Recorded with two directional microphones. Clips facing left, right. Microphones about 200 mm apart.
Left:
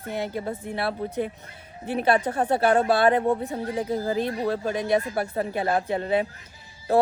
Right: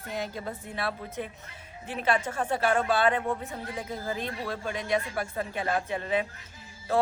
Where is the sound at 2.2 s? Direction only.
35° left (ahead or behind).